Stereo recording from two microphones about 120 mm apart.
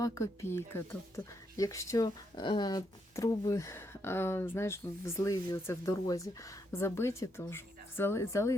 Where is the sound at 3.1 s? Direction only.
25° left (ahead or behind).